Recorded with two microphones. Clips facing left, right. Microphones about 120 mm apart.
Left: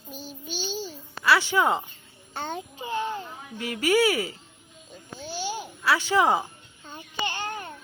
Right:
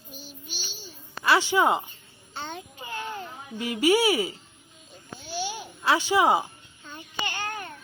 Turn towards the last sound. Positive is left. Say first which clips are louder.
# left 1 dB
turn(degrees=30)  # may be behind; listen again after turning